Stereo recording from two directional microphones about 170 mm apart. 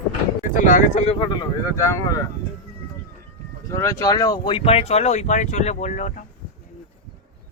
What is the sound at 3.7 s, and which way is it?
Speech, 20° left (ahead or behind).